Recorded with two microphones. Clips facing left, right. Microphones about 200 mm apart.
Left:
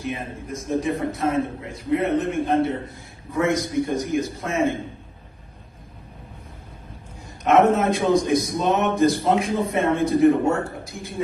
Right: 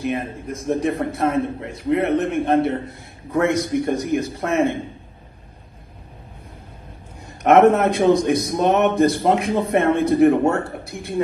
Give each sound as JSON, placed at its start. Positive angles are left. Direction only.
{"t": 0.0, "sound": "a man's voice", "side_deg": -60}
{"t": 7.4, "sound": "a man's voice", "side_deg": -60}